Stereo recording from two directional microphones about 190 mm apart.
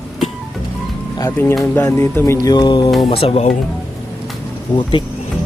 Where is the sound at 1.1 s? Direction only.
15° left (ahead or behind); by 3.5 s 30° left (ahead or behind).